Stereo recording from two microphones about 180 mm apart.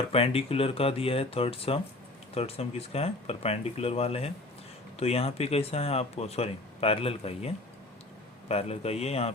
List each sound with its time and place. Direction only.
0.1 s speech: 35° left (ahead or behind)